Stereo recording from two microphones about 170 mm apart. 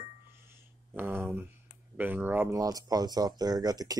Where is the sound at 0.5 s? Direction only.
15° right (ahead or behind).